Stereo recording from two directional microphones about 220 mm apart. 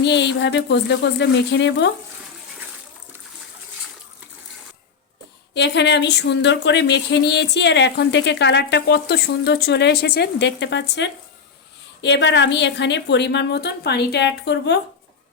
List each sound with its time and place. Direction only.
0.0 s speech: 55° left (ahead or behind)
5.5 s speech: 50° left (ahead or behind)